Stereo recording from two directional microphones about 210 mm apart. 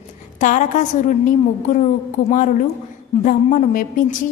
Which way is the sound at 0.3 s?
35° left (ahead or behind).